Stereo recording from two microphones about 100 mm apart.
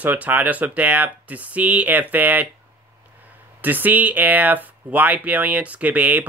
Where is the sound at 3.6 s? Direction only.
20° right (ahead or behind).